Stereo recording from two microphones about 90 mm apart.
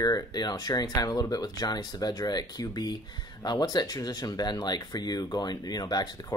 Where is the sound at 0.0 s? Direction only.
50° left (ahead or behind).